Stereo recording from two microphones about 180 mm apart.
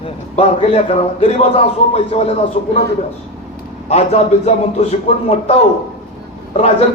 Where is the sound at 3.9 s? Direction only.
35° left (ahead or behind).